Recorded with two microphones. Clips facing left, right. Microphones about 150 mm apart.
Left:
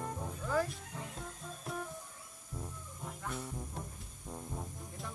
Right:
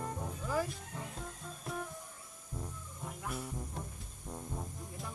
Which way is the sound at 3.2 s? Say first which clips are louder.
Right 1 dB; 5° right (ahead or behind).